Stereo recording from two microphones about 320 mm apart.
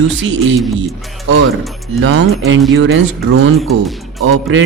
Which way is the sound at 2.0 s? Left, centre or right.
Right.